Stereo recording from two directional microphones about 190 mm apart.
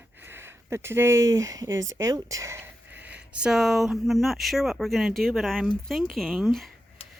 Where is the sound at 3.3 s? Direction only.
5° right (ahead or behind).